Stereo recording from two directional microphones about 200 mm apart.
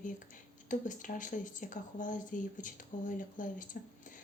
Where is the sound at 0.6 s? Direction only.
40° left (ahead or behind).